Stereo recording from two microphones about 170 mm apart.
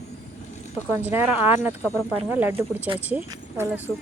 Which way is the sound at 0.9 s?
15° right (ahead or behind).